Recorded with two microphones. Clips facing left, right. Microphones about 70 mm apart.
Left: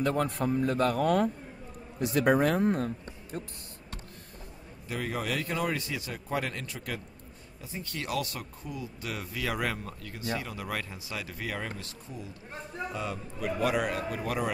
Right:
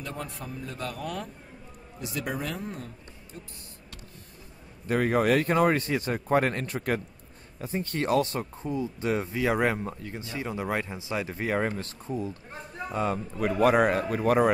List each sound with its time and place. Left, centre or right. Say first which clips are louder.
0.0 s speech: left 9 dB; left
4.8 s speech: right 10 dB; right